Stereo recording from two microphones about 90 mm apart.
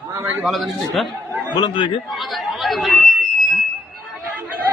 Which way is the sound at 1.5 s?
50° left (ahead or behind).